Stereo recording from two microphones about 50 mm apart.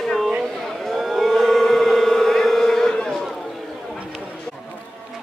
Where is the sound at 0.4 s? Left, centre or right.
Centre.